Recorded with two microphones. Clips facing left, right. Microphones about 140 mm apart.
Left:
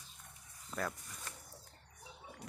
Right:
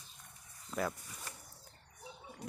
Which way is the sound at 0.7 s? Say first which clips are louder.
Right 3 dB; 5° right (ahead or behind).